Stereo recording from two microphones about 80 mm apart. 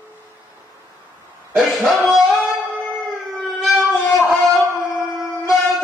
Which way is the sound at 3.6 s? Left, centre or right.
Centre.